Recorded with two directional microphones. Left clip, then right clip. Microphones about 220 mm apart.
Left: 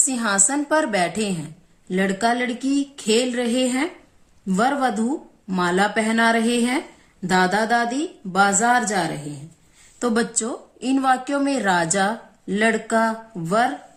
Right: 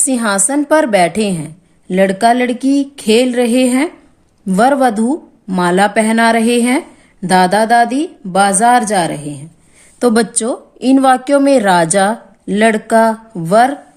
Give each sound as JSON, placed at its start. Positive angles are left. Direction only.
{"t": 0.0, "sound": "a woman's voice", "side_deg": -40}